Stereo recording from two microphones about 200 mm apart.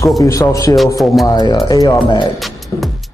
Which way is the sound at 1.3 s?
20° left (ahead or behind).